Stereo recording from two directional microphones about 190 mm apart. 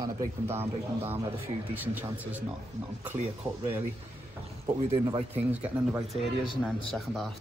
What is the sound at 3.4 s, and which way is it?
Speech, 25° right (ahead or behind).